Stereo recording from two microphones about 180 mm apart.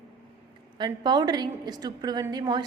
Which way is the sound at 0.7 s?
25° right (ahead or behind).